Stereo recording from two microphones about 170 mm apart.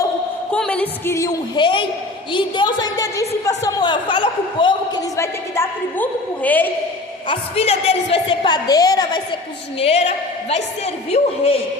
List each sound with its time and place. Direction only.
0.5 s a woman's voice: 5° left (ahead or behind); by 4.7 s 30° left (ahead or behind)
5.1 s a woman's voice: 15° left (ahead or behind)
7.3 s a woman's voice: 35° left (ahead or behind)
9.7 s a man's voice: 35° left (ahead or behind)